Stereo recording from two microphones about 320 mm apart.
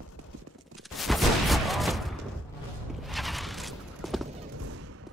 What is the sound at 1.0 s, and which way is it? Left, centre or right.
Fusillade, centre.